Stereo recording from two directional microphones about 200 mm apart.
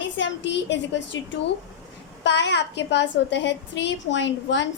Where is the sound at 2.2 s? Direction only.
60° left (ahead or behind).